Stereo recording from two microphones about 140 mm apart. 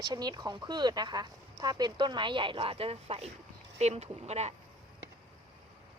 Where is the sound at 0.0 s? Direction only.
30° right (ahead or behind); by 4.5 s 50° right (ahead or behind).